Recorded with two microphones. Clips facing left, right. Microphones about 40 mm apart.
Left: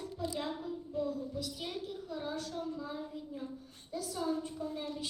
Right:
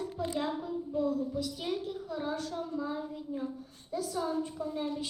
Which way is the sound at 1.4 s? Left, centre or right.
Centre.